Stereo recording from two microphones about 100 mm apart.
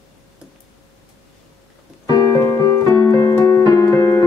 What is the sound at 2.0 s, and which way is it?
Keyboard, 40° left (ahead or behind).